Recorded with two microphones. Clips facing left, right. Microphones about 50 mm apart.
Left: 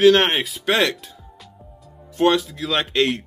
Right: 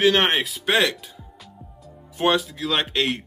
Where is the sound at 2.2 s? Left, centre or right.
Centre.